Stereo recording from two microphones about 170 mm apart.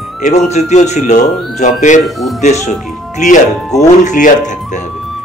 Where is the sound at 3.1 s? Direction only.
45° left (ahead or behind).